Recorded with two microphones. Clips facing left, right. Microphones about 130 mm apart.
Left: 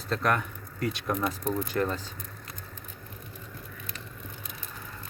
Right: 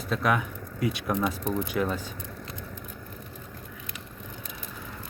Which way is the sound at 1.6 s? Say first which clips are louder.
Right 1 dB; 10° right (ahead or behind).